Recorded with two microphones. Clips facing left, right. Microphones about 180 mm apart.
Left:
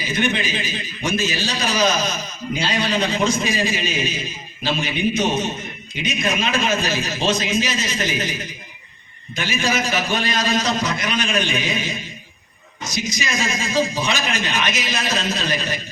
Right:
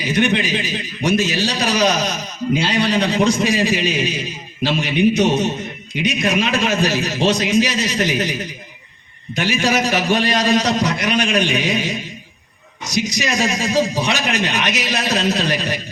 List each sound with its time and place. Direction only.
0.0 s a man's voice: 70° right (ahead or behind)